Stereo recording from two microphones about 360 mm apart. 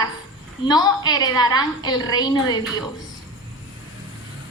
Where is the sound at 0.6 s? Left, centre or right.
Centre.